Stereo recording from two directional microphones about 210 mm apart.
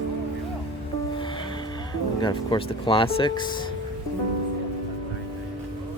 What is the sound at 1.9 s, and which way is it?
Speech, 20° left (ahead or behind).